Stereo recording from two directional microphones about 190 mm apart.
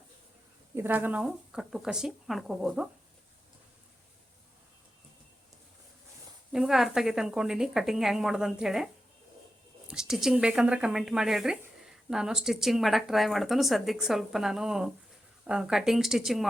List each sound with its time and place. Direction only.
0.8 s speech: 10° right (ahead or behind)
6.5 s speech: 5° right (ahead or behind)
9.9 s speech: 5° right (ahead or behind)